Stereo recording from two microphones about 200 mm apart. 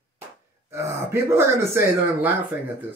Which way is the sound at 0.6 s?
15° right (ahead or behind).